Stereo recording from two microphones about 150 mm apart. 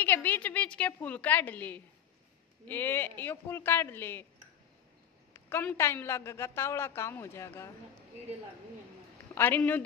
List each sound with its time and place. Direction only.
0.0 s a woman's voice: 10° left (ahead or behind)
5.3 s a woman's voice: 10° left (ahead or behind)
9.3 s a woman's voice: 10° left (ahead or behind)